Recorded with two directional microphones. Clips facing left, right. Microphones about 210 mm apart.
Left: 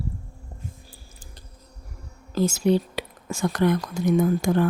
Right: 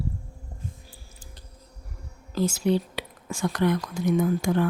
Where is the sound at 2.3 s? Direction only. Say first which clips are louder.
Left 3 dB; 45° left (ahead or behind).